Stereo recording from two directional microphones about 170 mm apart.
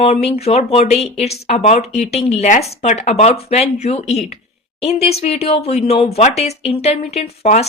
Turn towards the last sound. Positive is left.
turn(degrees=40)  # may be behind; listen again after turning